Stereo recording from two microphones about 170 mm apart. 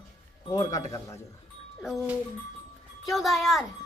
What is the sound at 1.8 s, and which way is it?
Speech, centre (ahead or behind).